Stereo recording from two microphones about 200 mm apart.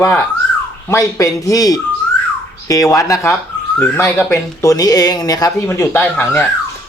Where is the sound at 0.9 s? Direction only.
15° left (ahead or behind).